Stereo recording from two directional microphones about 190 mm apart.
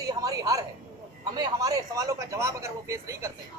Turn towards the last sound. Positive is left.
turn(degrees=-15)  # may be behind; listen again after turning